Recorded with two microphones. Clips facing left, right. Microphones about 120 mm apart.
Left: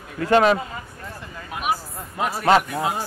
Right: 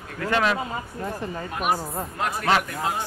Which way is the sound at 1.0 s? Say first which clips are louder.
Right 7 dB; 35° right (ahead or behind).